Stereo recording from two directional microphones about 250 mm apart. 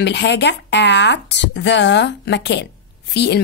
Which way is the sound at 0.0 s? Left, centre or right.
Left.